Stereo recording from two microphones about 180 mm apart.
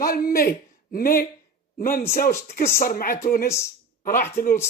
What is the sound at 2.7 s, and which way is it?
Speech, 55° left (ahead or behind).